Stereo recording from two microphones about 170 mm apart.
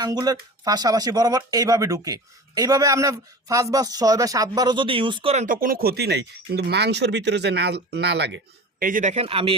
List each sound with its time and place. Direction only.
0.0 s speech: 25° right (ahead or behind)
5.5 s speech: 55° right (ahead or behind); by 8.4 s 90° right
8.8 s a man's voice: 50° right (ahead or behind); by 9.6 s 30° right (ahead or behind)